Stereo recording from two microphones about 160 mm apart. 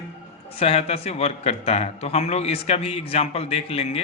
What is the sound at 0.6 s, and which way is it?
A man's voice, 40° left (ahead or behind).